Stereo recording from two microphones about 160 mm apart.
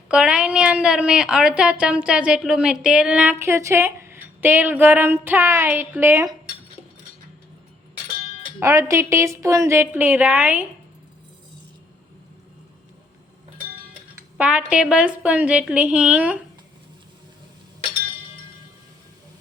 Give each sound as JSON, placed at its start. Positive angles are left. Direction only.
{"t": 0.1, "sound": "speech", "side_deg": -5}
{"t": 8.5, "sound": "speech", "side_deg": -15}
{"t": 14.3, "sound": "speech", "side_deg": -10}